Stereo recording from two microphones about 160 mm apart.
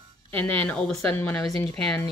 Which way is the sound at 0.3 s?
10° left (ahead or behind).